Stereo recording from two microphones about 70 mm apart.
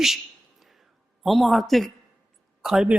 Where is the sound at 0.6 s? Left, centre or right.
Centre.